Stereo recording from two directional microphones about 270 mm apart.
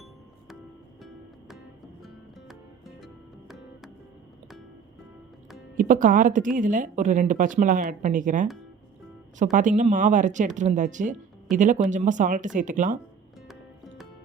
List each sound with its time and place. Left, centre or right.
5.7 s speech: right